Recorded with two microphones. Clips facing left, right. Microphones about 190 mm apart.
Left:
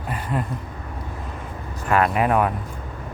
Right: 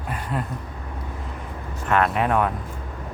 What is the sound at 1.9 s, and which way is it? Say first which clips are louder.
Speech: left 2 dB; 5° left (ahead or behind).